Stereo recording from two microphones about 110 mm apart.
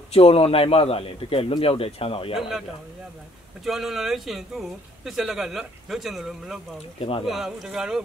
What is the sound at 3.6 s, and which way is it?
Speech, centre (ahead or behind).